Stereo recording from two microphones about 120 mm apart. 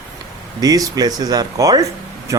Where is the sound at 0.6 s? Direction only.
30° right (ahead or behind).